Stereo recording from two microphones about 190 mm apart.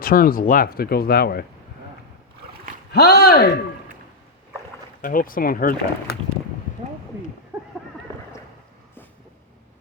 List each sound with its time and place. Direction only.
0.0 s speech: 50° left (ahead or behind)
2.9 s speech: 60° left (ahead or behind)
5.0 s speech: 45° left (ahead or behind)